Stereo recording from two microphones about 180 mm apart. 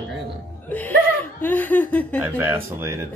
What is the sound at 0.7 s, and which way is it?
Speech, 10° left (ahead or behind).